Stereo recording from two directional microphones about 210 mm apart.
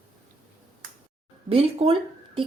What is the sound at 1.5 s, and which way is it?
Speech, 30° right (ahead or behind).